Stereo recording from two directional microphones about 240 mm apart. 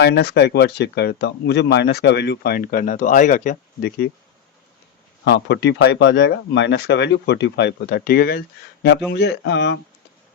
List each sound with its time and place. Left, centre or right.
0.0 s speech: left
5.2 s speech: left